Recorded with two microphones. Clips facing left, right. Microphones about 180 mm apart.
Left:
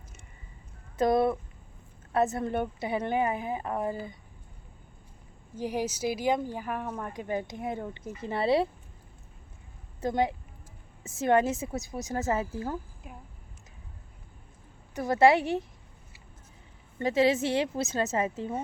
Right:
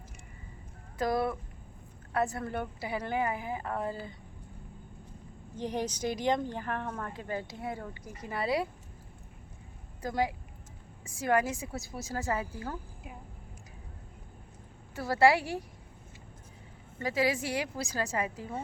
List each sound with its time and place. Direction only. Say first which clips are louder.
0.9 s a woman's voice: left 6 dB; 25° left (ahead or behind)
5.5 s speech: left 3 dB; 10° left (ahead or behind); by 8.7 s 30° left (ahead or behind)
10.0 s a woman's voice: left 4 dB; 25° left (ahead or behind)
14.9 s a woman's voice: left 3 dB; 20° left (ahead or behind)
17.0 s a woman's voice: left 6 dB; 25° left (ahead or behind)